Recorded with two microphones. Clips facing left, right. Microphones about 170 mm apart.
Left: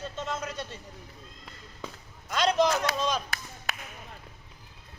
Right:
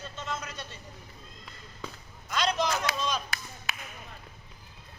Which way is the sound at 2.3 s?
45° left (ahead or behind).